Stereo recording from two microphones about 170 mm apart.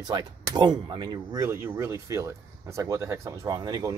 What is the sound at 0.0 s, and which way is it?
Speech, 25° right (ahead or behind).